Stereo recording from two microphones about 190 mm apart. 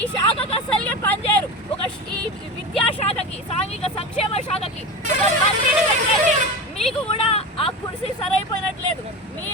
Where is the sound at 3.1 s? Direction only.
35° left (ahead or behind).